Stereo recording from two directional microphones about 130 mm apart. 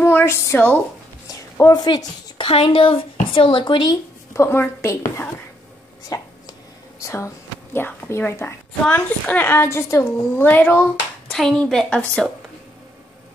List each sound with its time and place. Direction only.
0.0 s a woman's voice: 20° left (ahead or behind); by 4.0 s 35° left (ahead or behind)
4.3 s a woman's voice: 20° left (ahead or behind)
6.0 s a sound: 30° left (ahead or behind)
7.0 s a woman's voice: 25° left (ahead or behind)
11.2 s speech: 5° left (ahead or behind)